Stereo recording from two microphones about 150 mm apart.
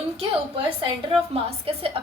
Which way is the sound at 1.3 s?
40° right (ahead or behind).